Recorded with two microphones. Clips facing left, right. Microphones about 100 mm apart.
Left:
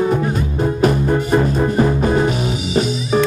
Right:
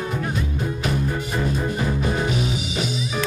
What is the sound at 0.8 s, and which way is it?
Music, 50° left (ahead or behind).